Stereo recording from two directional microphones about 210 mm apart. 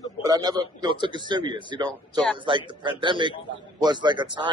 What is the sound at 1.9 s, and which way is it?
Speech, 5° left (ahead or behind).